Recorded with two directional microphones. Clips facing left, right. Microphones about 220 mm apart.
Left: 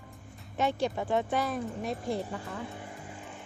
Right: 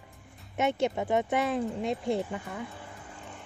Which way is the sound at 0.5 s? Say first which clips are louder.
Right 2 dB; 20° right (ahead or behind).